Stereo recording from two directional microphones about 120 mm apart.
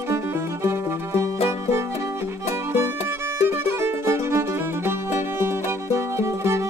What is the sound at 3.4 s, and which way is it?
Music, 20° right (ahead or behind).